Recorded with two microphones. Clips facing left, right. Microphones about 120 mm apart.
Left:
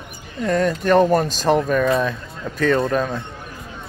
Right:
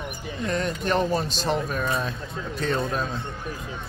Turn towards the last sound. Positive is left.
turn(degrees=60)  # may be behind; listen again after turning